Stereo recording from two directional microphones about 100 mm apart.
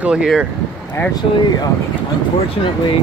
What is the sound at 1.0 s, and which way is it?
Speech, 25° left (ahead or behind).